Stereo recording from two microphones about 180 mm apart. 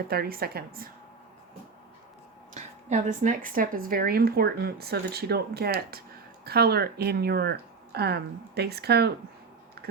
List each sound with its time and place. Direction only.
0.1 s speech: 60° right (ahead or behind)
2.6 s speech: 40° right (ahead or behind); by 9.1 s 65° right (ahead or behind)